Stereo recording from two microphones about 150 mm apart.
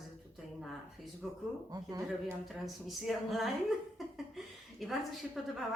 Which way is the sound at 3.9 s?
Centre (ahead or behind).